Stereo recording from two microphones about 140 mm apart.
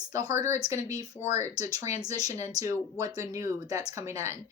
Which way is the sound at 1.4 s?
20° right (ahead or behind).